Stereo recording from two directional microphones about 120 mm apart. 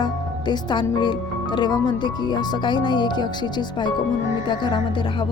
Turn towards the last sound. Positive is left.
turn(degrees=40)  # may be behind; listen again after turning